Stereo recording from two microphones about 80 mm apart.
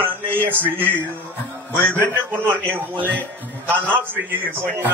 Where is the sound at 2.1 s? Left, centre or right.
Right.